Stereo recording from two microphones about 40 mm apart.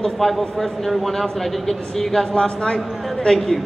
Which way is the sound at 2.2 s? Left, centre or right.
Left.